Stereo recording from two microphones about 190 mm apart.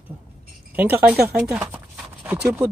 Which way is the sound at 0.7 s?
10° right (ahead or behind).